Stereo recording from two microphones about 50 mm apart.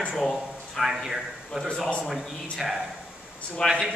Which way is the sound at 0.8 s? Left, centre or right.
Centre.